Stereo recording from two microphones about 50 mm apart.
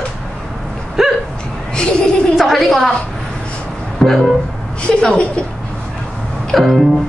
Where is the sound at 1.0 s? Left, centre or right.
Centre.